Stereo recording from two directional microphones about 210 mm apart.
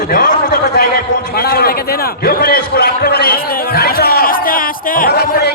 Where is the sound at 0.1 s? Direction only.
40° left (ahead or behind).